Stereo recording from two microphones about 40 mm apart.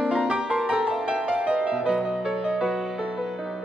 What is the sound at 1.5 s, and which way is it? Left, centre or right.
Music, right.